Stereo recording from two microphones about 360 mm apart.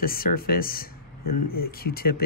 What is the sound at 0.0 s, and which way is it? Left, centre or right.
Speech, left.